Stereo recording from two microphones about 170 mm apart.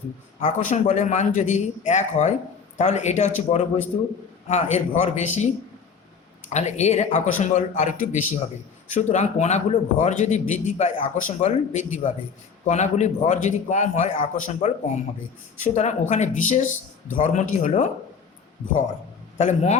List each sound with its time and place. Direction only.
0.6 s a man's voice: 45° left (ahead or behind)
6.5 s a man's voice: 40° left (ahead or behind)
19.4 s a man's voice: 40° left (ahead or behind)